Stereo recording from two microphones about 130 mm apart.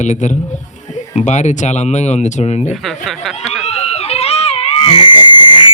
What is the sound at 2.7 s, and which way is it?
Chuckle, centre (ahead or behind).